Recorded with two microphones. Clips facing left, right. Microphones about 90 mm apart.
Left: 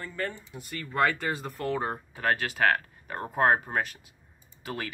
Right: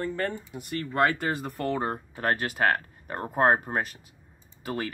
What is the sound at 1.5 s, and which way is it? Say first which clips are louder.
Speech: right 2 dB; 45° right (ahead or behind).